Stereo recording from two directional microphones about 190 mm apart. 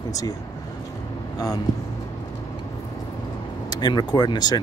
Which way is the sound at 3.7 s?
20° left (ahead or behind).